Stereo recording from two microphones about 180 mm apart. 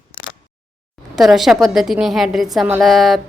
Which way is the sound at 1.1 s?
Centre (ahead or behind).